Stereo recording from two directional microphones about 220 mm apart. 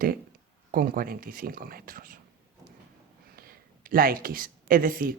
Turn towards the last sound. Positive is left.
turn(degrees=-40)  # may be behind; listen again after turning